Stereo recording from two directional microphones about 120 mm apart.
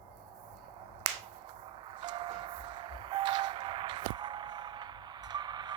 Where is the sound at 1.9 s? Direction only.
40° right (ahead or behind).